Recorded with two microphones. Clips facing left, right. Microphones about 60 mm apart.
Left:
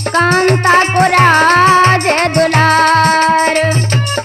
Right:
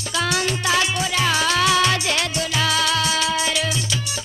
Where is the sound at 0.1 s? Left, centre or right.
Left.